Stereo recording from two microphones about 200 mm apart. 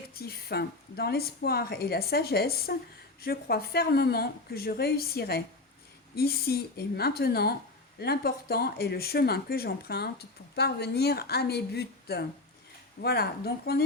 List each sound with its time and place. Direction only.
0.1 s speech: 50° left (ahead or behind)